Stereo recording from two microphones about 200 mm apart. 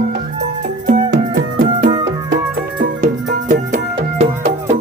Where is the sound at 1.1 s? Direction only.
65° right (ahead or behind).